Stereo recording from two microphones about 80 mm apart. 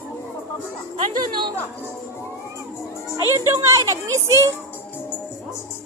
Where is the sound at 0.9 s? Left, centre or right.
Right.